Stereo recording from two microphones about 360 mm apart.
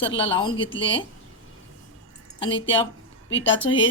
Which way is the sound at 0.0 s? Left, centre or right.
Centre.